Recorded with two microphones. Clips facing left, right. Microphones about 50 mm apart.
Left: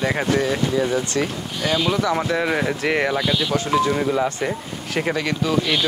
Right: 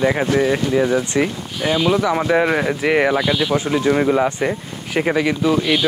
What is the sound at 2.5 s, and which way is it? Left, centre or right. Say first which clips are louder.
Speech: right 4 dB; centre.